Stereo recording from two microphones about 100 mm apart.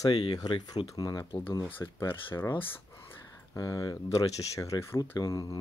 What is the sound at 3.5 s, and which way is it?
Speech, 40° left (ahead or behind).